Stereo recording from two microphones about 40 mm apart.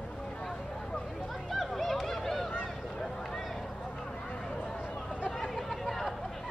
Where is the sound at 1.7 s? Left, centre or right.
Centre.